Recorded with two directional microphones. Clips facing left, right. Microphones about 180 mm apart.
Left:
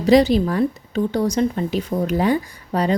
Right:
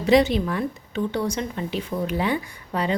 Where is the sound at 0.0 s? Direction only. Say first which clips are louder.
Left 4 dB; 35° left (ahead or behind).